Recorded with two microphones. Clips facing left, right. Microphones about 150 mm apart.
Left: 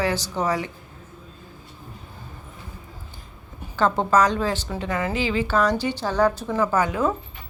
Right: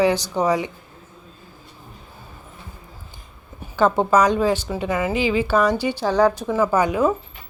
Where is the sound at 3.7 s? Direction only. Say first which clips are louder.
Right 3 dB; 10° right (ahead or behind).